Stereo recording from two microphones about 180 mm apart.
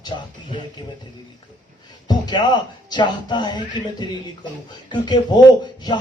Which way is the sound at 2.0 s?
25° left (ahead or behind).